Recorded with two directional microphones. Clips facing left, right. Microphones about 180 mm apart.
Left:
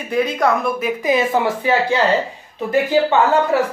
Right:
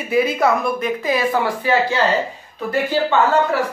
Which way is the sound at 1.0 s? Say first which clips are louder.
Left 4 dB; 20° left (ahead or behind).